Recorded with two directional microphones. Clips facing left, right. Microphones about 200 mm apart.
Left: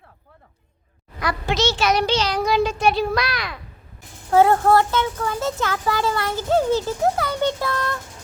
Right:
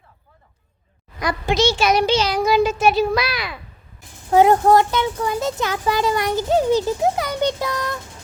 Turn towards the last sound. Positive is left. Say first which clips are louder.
# right 1 dB
turn(degrees=-15)  # may be behind; listen again after turning